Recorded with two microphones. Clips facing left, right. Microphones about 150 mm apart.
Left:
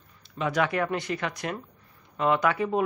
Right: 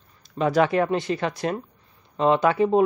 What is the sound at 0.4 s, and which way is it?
Speech, 35° right (ahead or behind).